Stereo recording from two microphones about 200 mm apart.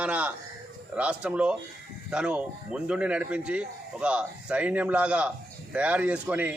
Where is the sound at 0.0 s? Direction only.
5° right (ahead or behind).